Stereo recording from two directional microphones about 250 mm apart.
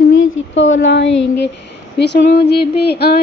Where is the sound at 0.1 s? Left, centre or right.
Left.